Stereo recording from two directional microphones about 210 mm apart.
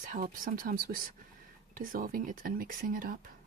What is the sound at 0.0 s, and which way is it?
Speech, 40° right (ahead or behind).